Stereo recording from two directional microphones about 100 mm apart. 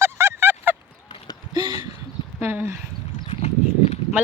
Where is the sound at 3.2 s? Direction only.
90° left.